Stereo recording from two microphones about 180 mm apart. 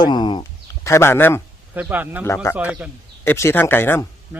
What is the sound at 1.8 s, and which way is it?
Speech, 10° right (ahead or behind).